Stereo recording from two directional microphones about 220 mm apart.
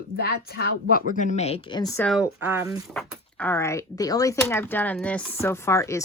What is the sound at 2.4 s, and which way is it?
Speech, 10° right (ahead or behind).